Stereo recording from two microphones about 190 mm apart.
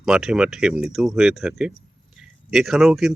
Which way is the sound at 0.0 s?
5° right (ahead or behind).